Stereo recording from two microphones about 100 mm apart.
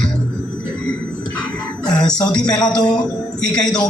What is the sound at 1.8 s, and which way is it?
Speech, 10° left (ahead or behind).